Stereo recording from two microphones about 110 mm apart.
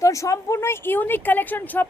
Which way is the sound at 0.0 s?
30° left (ahead or behind).